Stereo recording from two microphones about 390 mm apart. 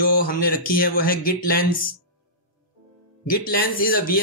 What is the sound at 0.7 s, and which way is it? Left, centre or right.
Speech, left.